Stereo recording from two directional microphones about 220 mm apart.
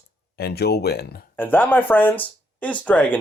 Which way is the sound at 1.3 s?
10° left (ahead or behind).